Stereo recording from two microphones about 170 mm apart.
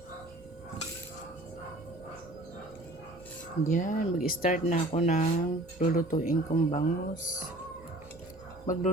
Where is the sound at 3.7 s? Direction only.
50° left (ahead or behind).